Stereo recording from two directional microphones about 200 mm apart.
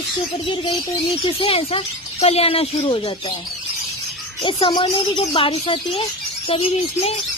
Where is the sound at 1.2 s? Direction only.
25° left (ahead or behind).